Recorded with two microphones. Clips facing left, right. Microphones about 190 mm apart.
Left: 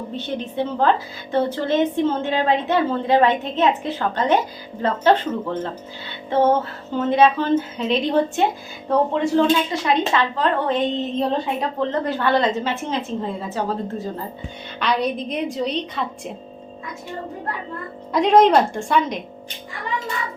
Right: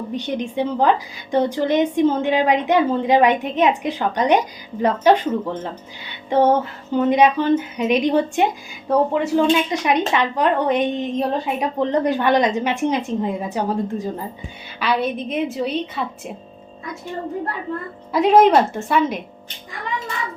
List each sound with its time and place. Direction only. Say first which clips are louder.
0.1 s a woman's voice: right 5 dB; 15° right (ahead or behind)
14.8 s a woman's voice: right 1 dB; 5° right (ahead or behind)
18.1 s a woman's voice: right 1 dB; 5° right (ahead or behind)